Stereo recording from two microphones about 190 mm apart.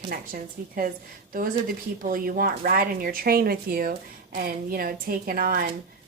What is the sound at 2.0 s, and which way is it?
Speech, 50° right (ahead or behind).